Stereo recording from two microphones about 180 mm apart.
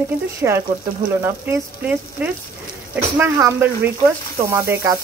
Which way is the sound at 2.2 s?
10° right (ahead or behind).